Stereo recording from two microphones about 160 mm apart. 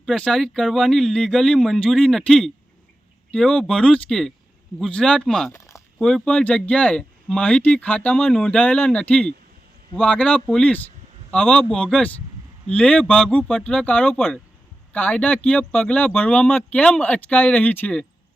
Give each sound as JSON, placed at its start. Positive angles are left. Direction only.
{"t": 0.0, "sound": "speech", "side_deg": 5}
{"t": 5.5, "sound": "a sound", "side_deg": 20}
{"t": 6.0, "sound": "speech", "side_deg": 5}